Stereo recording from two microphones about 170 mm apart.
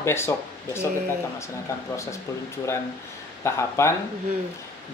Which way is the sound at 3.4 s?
15° left (ahead or behind).